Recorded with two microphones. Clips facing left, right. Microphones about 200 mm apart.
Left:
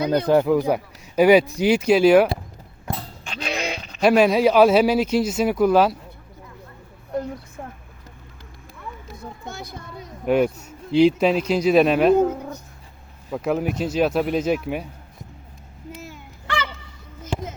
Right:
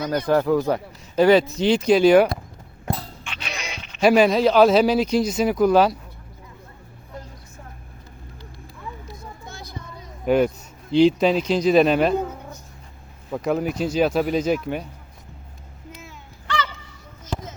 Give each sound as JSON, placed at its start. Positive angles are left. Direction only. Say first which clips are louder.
{"t": 0.1, "sound": "speech", "louder": "left 1 dB", "side_deg": 20}
{"t": 3.5, "sound": "a sound", "louder": "left 8 dB", "side_deg": 55}
{"t": 4.0, "sound": "speech", "louder": "even", "side_deg": 0}
{"t": 10.2, "sound": "speech", "louder": "even", "side_deg": 5}
{"t": 13.3, "sound": "speech", "louder": "even", "side_deg": 0}